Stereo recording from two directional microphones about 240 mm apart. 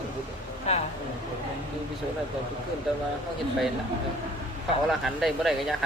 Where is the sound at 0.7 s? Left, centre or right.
Left.